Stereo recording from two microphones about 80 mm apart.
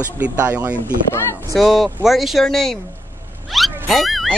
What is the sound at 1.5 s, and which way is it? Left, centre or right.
Speech, centre.